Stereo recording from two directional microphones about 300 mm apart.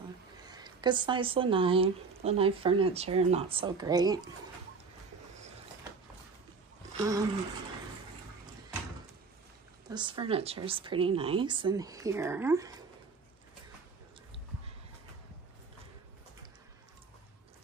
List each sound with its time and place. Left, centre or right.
0.4 s speech: centre
7.0 s a sound: centre
9.8 s speech: centre